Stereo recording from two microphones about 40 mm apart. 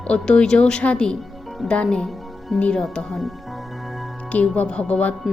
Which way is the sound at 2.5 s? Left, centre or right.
Centre.